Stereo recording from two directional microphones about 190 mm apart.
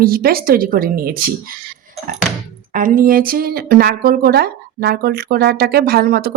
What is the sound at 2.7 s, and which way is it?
Speech, 45° right (ahead or behind).